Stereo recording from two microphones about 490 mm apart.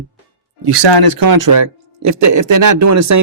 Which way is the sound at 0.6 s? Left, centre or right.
Right.